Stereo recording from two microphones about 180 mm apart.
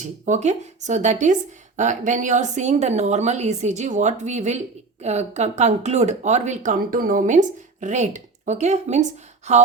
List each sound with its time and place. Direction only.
0.3 s speech: 40° right (ahead or behind)